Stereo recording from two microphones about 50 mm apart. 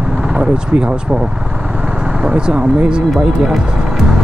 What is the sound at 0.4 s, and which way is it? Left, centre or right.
Speech, centre.